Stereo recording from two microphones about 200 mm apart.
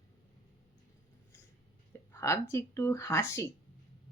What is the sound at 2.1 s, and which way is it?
Speech, 15° left (ahead or behind).